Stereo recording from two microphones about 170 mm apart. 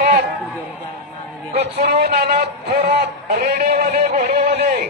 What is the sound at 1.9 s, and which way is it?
Speech, 70° right (ahead or behind).